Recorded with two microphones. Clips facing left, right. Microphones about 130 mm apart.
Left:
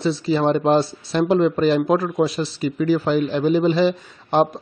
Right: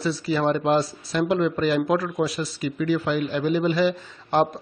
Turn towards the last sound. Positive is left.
turn(degrees=25)  # may be behind; listen again after turning